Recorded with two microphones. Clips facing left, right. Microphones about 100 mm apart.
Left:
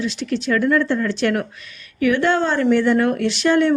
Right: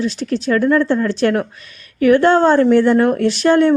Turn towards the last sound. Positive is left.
turn(degrees=-40)  # may be behind; listen again after turning